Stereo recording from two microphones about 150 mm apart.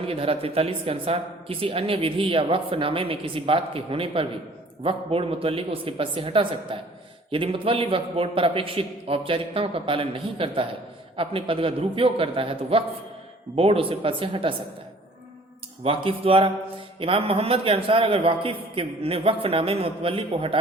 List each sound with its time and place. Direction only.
0.1 s a man's voice: 40° right (ahead or behind)
15.8 s a man's voice: 40° right (ahead or behind)